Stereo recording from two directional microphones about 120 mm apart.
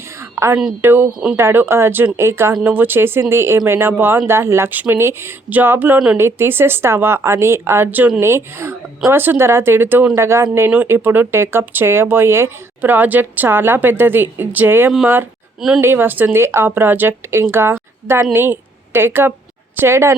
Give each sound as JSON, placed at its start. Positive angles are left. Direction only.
{"t": 0.3, "sound": "a woman's voice", "side_deg": -20}